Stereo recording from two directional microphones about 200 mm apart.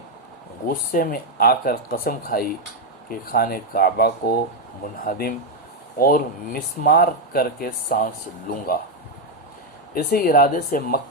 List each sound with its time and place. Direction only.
0.7 s speech: 45° left (ahead or behind)
9.9 s speech: 50° left (ahead or behind)